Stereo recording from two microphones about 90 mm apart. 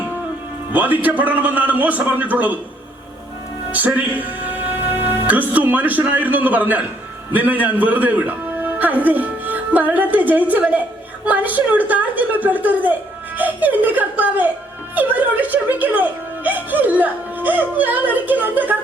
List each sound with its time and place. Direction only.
0.7 s a woman's voice: 20° right (ahead or behind)
3.7 s a woman's voice: 20° right (ahead or behind)